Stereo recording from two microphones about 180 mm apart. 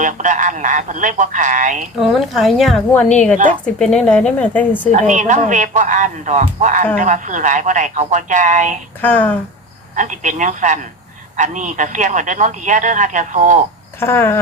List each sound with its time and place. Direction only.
0.0 s speech: 45° right (ahead or behind)
2.0 s a woman's voice: centre (ahead or behind)
4.9 s speech: 40° right (ahead or behind)
9.0 s speech: 10° left (ahead or behind)
9.9 s speech: 45° right (ahead or behind)
14.0 s speech: 15° left (ahead or behind)